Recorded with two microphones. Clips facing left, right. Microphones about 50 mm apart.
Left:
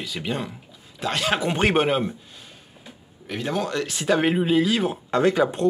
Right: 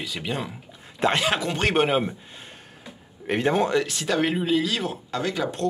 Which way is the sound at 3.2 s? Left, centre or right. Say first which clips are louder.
Right 5 dB; right.